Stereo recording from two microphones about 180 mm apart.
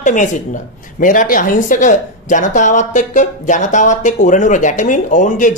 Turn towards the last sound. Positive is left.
turn(degrees=45)  # may be behind; listen again after turning